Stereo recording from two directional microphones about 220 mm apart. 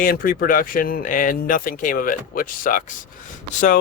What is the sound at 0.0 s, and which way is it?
Speech, 40° left (ahead or behind).